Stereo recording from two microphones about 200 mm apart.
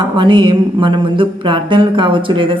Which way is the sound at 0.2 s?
20° right (ahead or behind).